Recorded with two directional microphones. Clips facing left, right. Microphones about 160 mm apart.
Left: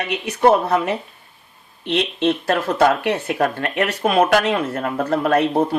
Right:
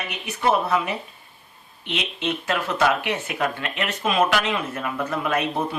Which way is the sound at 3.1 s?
50° left (ahead or behind).